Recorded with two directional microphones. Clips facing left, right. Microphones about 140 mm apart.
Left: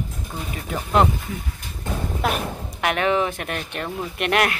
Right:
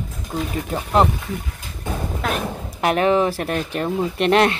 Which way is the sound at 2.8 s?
35° right (ahead or behind).